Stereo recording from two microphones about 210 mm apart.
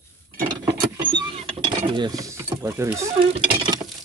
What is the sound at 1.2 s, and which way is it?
Mechanisms, 20° right (ahead or behind).